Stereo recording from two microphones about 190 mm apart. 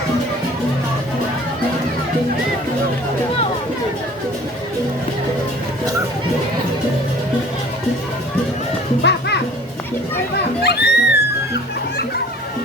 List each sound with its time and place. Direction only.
9.0 s music: 60° left (ahead or behind)
10.6 s music: 60° left (ahead or behind)